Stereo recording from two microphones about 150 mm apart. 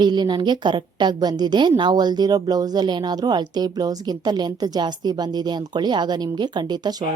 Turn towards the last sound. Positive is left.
turn(degrees=-25)  # may be behind; listen again after turning